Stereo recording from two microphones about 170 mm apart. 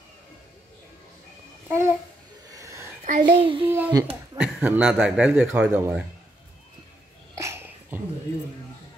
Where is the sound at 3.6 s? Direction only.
15° right (ahead or behind).